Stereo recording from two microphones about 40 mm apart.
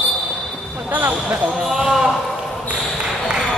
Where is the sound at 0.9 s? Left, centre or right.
Right.